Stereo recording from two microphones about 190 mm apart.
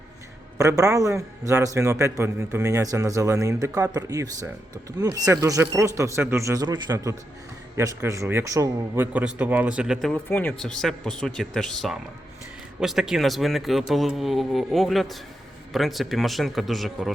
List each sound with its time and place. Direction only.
0.6 s a man's voice: 15° right (ahead or behind); by 17.1 s centre (ahead or behind)